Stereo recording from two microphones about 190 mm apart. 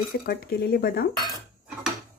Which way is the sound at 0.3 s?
55° left (ahead or behind).